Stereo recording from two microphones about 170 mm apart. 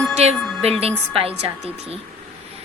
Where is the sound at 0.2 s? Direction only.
40° right (ahead or behind).